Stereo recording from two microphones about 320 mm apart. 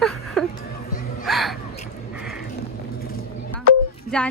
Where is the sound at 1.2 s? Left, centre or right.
Centre.